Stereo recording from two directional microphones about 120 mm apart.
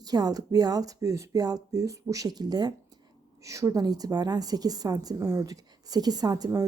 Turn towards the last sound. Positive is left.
turn(degrees=-30)  # may be behind; listen again after turning